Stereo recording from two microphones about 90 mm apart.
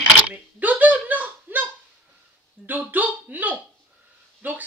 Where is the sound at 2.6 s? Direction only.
20° right (ahead or behind).